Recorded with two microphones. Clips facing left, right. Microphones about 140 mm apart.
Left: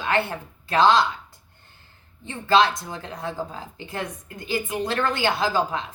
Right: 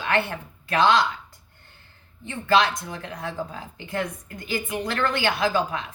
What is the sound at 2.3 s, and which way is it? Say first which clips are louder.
A woman's voice: left 2 dB; 25° left (ahead or behind).